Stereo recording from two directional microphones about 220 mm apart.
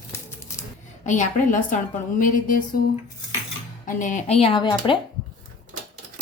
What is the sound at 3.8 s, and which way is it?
Speech, 35° left (ahead or behind).